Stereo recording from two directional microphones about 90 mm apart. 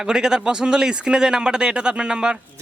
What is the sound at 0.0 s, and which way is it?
A man's voice, 5° right (ahead or behind).